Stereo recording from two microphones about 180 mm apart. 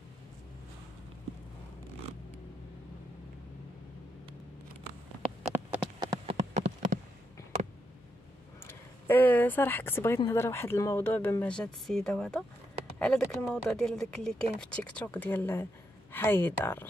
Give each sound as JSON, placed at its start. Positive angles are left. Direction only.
{"t": 5.8, "sound": "rain on surface", "side_deg": -25}
{"t": 6.5, "sound": "a sound", "side_deg": -40}
{"t": 8.6, "sound": "speech", "side_deg": 10}